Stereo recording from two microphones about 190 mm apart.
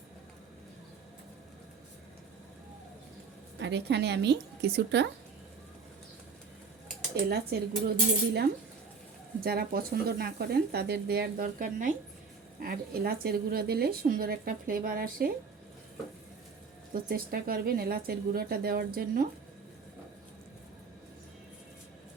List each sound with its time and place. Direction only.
3.6 s speech: 65° right (ahead or behind)
7.3 s speech: 55° right (ahead or behind)
16.9 s speech: 50° right (ahead or behind)